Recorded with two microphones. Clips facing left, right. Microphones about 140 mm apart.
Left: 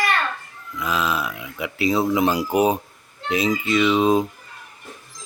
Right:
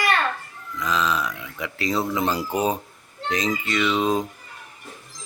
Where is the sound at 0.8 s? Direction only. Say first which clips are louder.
Even; 10° left (ahead or behind).